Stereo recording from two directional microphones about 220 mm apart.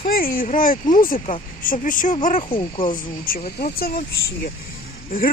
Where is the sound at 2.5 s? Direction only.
20° left (ahead or behind).